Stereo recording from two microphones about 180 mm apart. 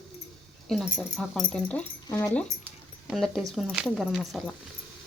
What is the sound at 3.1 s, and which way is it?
Speech, centre (ahead or behind).